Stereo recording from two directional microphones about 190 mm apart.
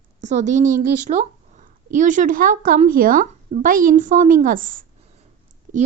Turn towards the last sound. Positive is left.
turn(degrees=-40)  # may be behind; listen again after turning